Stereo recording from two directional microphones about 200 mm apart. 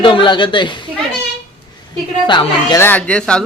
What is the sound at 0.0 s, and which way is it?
Speech, 25° left (ahead or behind).